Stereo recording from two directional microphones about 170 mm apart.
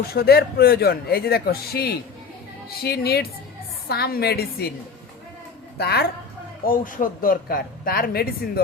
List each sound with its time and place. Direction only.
0.1 s a man's voice: 65° left (ahead or behind)
5.7 s a woman's voice: 70° left (ahead or behind)
6.7 s a man's voice: 55° left (ahead or behind)